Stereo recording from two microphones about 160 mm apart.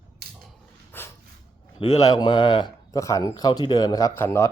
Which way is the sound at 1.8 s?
40° left (ahead or behind).